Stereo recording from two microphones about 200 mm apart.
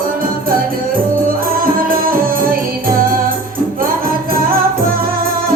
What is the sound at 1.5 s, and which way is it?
Music, 45° right (ahead or behind).